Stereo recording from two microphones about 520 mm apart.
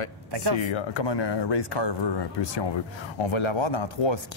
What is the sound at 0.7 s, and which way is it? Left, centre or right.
Speech, left.